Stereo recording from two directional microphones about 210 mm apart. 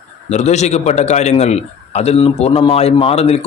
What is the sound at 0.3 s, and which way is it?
A man's voice, 30° left (ahead or behind).